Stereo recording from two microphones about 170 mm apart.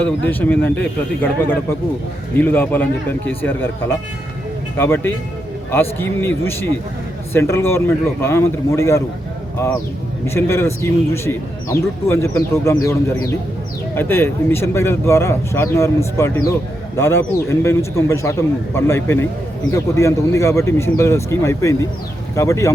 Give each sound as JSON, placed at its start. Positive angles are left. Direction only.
{"t": 0.0, "sound": "speech", "side_deg": 10}